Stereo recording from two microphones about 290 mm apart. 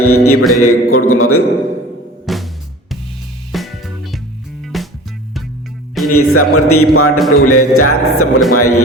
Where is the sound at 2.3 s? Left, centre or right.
Centre.